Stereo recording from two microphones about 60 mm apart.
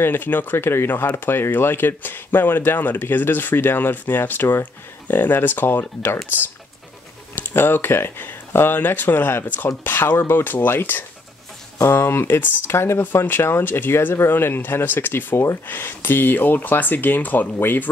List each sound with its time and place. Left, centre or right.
0.0 s speech: left
7.3 s speech: left